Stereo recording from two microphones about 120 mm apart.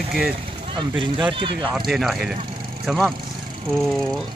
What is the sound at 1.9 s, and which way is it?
Speech, centre (ahead or behind).